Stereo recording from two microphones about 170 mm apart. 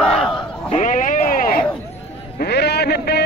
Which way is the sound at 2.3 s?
70° left (ahead or behind).